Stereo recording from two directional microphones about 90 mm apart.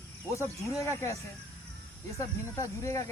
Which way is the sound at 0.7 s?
35° left (ahead or behind).